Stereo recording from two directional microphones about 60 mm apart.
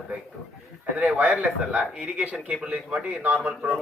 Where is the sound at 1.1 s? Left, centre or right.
Right.